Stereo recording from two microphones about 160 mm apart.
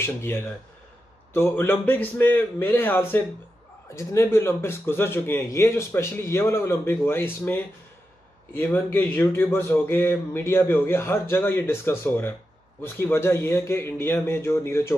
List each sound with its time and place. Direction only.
0.0 s a man's voice: 15° left (ahead or behind)
8.5 s a man's voice: 15° left (ahead or behind)